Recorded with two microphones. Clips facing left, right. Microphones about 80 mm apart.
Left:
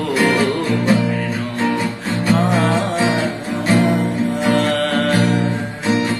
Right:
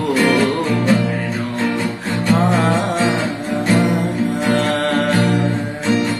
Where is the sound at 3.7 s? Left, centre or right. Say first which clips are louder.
Left 2 dB; centre.